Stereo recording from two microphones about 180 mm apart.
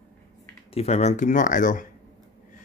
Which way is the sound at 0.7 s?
35° left (ahead or behind).